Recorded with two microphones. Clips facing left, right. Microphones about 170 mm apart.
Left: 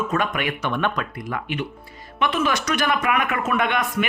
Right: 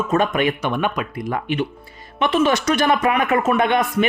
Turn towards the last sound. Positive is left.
turn(degrees=-30)  # may be behind; listen again after turning